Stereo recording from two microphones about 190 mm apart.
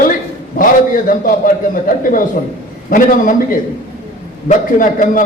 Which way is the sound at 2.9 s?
45° left (ahead or behind).